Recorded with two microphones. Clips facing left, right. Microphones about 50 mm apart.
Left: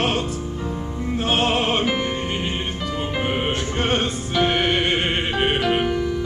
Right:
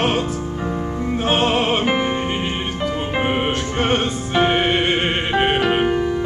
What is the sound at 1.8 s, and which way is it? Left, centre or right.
Music, right.